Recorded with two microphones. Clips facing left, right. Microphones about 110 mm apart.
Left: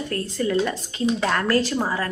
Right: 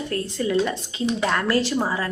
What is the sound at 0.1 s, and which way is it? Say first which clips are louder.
A woman's voice: even; 25° right (ahead or behind).